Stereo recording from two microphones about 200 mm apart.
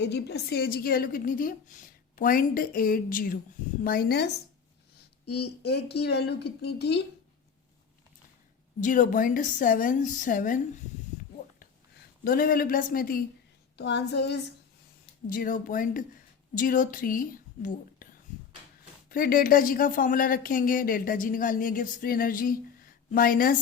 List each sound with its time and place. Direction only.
0.0 s speech: 55° left (ahead or behind)
5.6 s speech: 55° left (ahead or behind)
8.8 s a woman's voice: 40° left (ahead or behind)
12.2 s speech: 45° left (ahead or behind)
13.7 s speech: 60° left (ahead or behind)
15.3 s a woman's voice: 45° left (ahead or behind)